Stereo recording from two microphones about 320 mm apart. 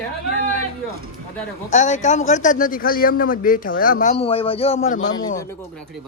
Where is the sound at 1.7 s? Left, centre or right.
Left.